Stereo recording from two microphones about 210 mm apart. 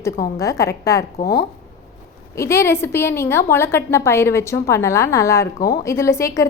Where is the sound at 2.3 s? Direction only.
15° left (ahead or behind).